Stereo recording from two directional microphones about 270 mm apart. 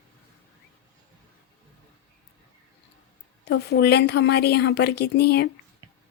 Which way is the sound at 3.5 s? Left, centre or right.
Left.